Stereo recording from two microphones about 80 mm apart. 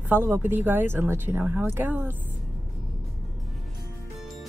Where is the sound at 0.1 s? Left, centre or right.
Right.